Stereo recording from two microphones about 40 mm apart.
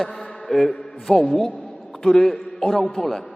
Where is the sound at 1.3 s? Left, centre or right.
Centre.